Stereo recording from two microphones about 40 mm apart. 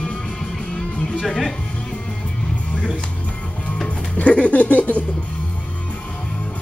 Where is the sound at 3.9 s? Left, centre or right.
Left.